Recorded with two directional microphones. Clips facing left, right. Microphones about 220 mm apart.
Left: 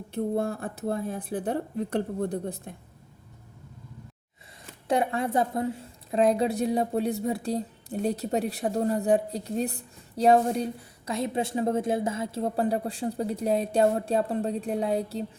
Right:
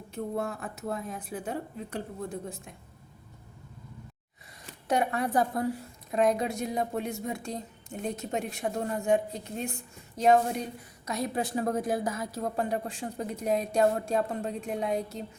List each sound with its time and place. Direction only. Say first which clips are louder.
0.1 s a woman's voice: left 5 dB; 30° left (ahead or behind)
4.9 s a woman's voice: left 2 dB; 25° left (ahead or behind)